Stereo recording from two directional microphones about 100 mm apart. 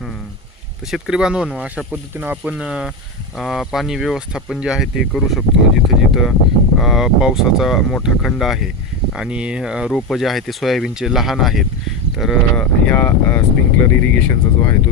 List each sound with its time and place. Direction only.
0.9 s speech: 5° right (ahead or behind)
12.5 s speech: 15° left (ahead or behind)